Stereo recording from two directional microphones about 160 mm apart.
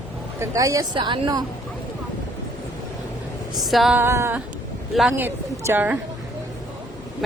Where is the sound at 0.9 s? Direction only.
30° right (ahead or behind).